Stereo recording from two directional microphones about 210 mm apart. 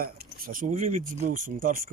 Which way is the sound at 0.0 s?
45° right (ahead or behind).